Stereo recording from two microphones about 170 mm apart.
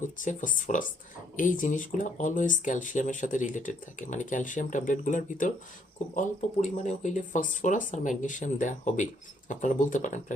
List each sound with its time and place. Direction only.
0.0 s speech: 50° left (ahead or behind)